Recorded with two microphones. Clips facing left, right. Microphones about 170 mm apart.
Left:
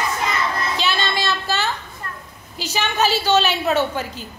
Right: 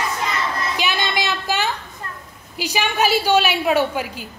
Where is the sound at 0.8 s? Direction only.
15° right (ahead or behind).